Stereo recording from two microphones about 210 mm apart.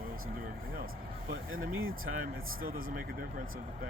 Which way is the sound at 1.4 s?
70° right (ahead or behind).